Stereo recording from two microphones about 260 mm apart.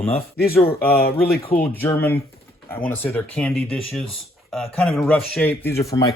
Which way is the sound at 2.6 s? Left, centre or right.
Centre.